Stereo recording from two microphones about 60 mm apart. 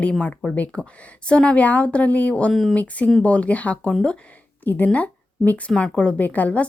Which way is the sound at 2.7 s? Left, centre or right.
Left.